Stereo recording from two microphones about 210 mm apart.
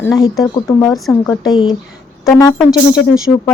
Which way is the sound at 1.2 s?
20° left (ahead or behind).